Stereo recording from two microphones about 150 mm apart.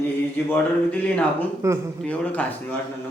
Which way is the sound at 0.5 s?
10° left (ahead or behind).